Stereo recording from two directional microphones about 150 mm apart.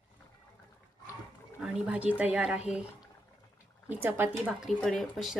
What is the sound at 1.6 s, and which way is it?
Speech, 5° right (ahead or behind).